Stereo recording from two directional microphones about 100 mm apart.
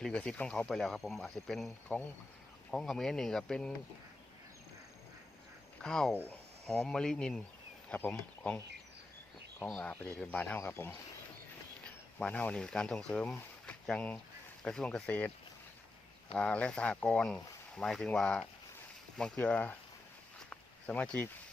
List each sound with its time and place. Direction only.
0.0 s speech: 10° left (ahead or behind)
5.8 s speech: 5° left (ahead or behind)
9.6 s speech: 15° left (ahead or behind)
10.6 s speech: 25° left (ahead or behind)
16.3 s speech: 10° left (ahead or behind)
20.5 s a sound: 15° left (ahead or behind)